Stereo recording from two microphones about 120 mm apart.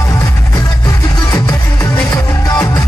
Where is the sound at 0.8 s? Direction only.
30° left (ahead or behind).